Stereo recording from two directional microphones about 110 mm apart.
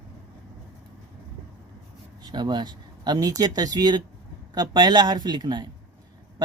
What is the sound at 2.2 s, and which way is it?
Speech, 40° right (ahead or behind).